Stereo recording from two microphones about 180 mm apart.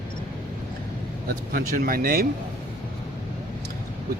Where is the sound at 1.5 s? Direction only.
55° right (ahead or behind).